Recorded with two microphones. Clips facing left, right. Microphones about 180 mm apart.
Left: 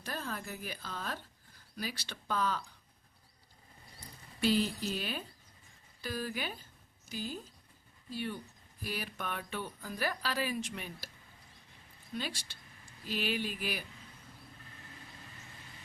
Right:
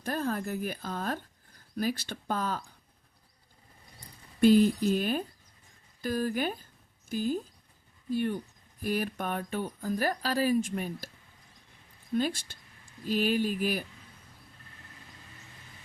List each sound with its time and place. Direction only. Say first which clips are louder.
0.0 s speech: right 9 dB; 50° right (ahead or behind)
4.4 s speech: right 10 dB; 50° right (ahead or behind)
12.1 s speech: right 11 dB; 50° right (ahead or behind)